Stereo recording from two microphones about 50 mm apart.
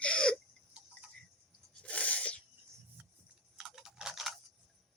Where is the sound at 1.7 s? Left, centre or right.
Left.